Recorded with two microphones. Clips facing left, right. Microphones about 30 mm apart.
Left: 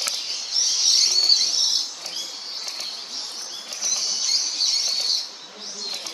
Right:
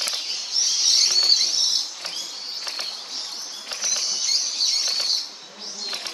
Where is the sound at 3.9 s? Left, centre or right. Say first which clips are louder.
Even; centre.